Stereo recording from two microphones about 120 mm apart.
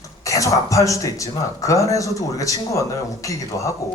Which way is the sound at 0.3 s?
25° left (ahead or behind).